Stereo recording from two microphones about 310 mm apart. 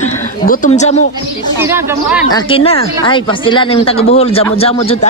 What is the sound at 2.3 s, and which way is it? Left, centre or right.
Speech, centre.